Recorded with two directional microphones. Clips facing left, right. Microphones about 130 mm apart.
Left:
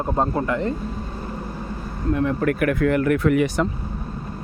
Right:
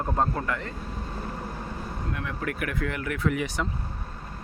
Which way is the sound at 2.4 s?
55° left (ahead or behind).